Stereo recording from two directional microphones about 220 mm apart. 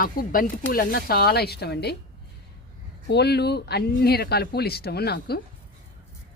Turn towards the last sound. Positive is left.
turn(degrees=45)  # may be behind; listen again after turning